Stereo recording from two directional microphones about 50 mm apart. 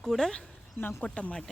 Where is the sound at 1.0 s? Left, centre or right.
Left.